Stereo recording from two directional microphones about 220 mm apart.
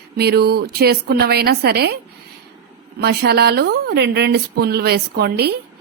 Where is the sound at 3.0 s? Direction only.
50° right (ahead or behind).